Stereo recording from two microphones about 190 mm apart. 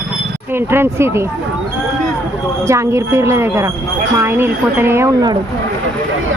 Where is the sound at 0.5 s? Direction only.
10° right (ahead or behind).